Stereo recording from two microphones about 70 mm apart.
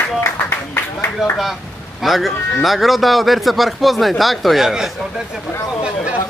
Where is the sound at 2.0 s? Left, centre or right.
Centre.